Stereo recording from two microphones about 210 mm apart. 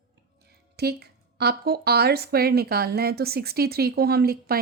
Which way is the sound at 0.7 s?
50° right (ahead or behind).